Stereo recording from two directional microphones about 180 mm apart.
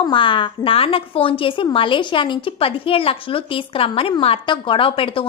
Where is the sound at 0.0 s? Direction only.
25° left (ahead or behind).